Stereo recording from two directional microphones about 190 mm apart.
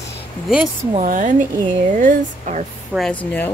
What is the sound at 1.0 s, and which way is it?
A woman's voice, 40° right (ahead or behind).